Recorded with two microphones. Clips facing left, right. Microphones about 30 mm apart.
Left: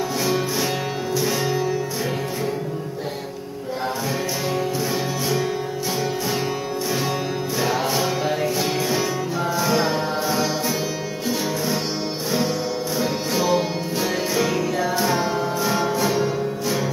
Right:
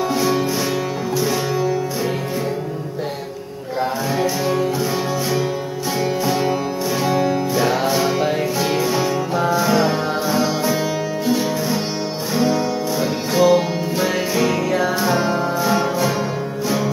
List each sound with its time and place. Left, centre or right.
1.1 s music: centre
4.2 s music: centre
5.9 s music: centre
13.0 s music: centre